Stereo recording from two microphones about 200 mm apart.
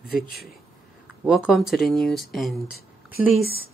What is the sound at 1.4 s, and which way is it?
Speech, centre (ahead or behind).